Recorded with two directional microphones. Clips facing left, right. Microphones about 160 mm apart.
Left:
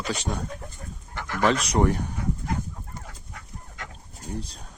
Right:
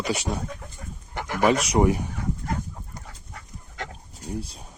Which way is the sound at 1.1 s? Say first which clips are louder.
Right 2 dB; 15° right (ahead or behind).